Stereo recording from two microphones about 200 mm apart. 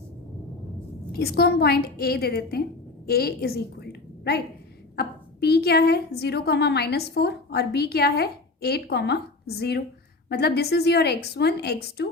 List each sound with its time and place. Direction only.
1.1 s a woman's voice: 50° left (ahead or behind)